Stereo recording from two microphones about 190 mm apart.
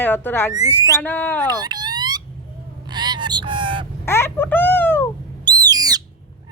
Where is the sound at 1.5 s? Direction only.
20° right (ahead or behind).